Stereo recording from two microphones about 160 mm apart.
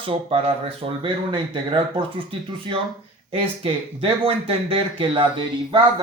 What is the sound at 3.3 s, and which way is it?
Speech, 35° right (ahead or behind).